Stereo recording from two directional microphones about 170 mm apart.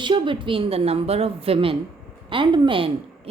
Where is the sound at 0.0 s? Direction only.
30° right (ahead or behind).